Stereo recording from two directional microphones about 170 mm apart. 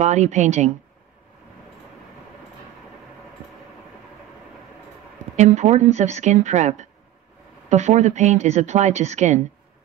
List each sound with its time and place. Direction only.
0.0 s speech: 45° right (ahead or behind)
5.3 s speech: 45° right (ahead or behind)